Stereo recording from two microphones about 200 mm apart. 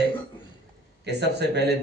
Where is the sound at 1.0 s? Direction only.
55° right (ahead or behind).